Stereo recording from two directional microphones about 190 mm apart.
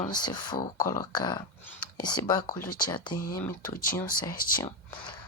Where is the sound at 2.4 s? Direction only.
50° left (ahead or behind).